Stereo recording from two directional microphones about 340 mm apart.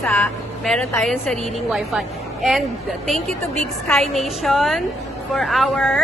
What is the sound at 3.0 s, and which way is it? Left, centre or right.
A woman's voice, centre.